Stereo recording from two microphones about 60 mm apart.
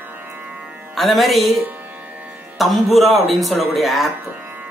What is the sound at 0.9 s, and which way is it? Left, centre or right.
Speech, centre.